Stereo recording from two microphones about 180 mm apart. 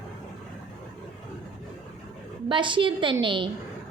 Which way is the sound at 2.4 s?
25° right (ahead or behind).